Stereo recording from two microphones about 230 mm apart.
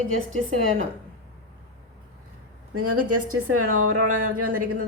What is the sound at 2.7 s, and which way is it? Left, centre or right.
A woman's voice, right.